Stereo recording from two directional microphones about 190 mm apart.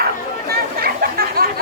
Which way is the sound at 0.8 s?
50° right (ahead or behind).